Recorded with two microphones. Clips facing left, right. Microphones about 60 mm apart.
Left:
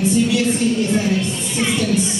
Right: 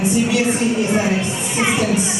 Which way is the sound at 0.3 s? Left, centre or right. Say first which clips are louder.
Even; right.